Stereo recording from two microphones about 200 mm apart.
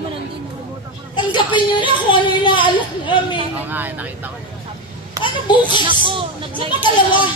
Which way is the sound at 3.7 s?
10° right (ahead or behind).